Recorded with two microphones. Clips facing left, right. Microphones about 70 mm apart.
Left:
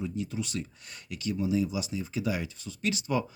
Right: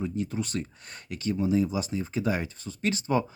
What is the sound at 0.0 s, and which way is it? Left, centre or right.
A man's voice, right.